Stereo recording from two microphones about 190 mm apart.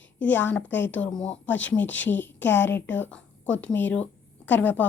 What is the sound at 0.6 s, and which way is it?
Speech, 70° left (ahead or behind).